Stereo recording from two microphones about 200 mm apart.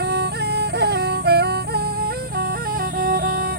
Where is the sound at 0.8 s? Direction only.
55° right (ahead or behind).